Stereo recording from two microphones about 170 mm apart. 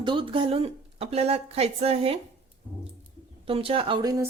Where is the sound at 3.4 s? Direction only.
35° right (ahead or behind).